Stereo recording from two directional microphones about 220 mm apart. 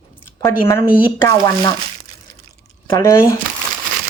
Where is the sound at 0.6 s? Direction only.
10° left (ahead or behind).